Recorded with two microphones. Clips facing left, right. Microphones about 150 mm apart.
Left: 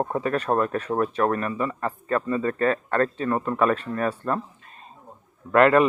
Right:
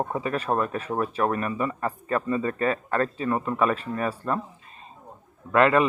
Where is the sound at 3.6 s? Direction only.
35° left (ahead or behind).